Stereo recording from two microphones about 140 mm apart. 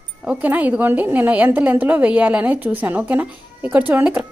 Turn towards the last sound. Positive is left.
turn(degrees=-10)  # may be behind; listen again after turning